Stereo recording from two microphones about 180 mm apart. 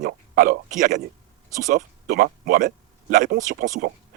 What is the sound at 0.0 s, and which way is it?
A man's voice, 50° right (ahead or behind).